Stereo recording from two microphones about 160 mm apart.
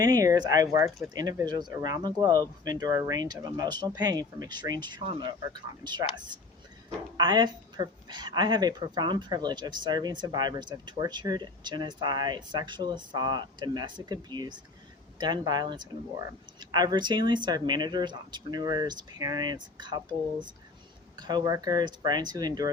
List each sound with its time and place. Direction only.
0.0 s a woman's voice: 20° right (ahead or behind)
7.2 s a woman's voice: 30° right (ahead or behind)
21.2 s a woman's voice: 25° right (ahead or behind)